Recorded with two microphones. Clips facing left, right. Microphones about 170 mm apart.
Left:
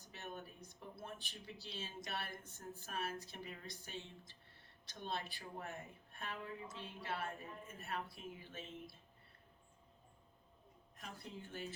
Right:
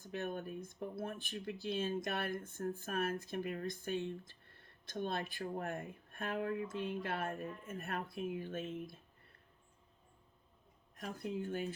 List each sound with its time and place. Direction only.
0.1 s speech: 55° right (ahead or behind)
11.0 s speech: 50° right (ahead or behind)